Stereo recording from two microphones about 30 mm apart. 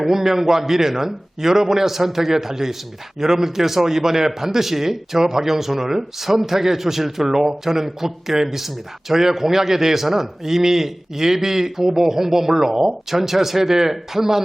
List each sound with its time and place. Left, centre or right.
0.0 s speech: centre